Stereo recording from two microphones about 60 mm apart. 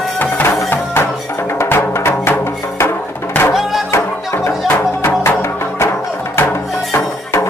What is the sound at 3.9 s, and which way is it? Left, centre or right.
Music, left.